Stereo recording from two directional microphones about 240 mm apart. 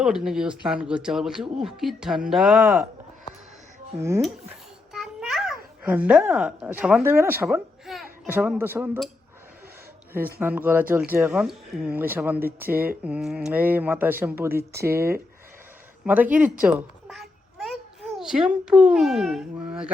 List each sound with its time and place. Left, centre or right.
0.0 s speech: centre
4.9 s a child's voice: centre
10.4 s speech: centre